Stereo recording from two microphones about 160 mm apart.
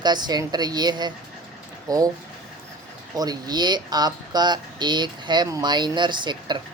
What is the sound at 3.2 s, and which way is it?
Speech, 25° right (ahead or behind).